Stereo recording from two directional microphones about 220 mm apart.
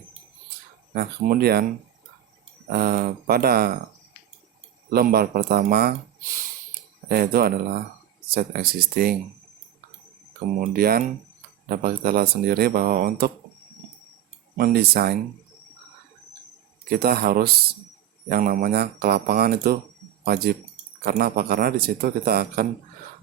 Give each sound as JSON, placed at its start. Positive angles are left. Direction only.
{"t": 0.9, "sound": "speech", "side_deg": -45}
{"t": 2.6, "sound": "speech", "side_deg": -45}
{"t": 4.9, "sound": "speech", "side_deg": -45}
{"t": 7.1, "sound": "speech", "side_deg": -45}
{"t": 10.6, "sound": "speech", "side_deg": -45}
{"t": 14.6, "sound": "speech", "side_deg": -45}
{"t": 16.9, "sound": "speech", "side_deg": -45}